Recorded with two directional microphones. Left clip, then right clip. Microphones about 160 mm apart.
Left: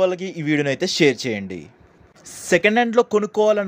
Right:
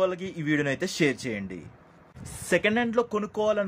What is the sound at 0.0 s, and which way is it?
Speech, 25° left (ahead or behind).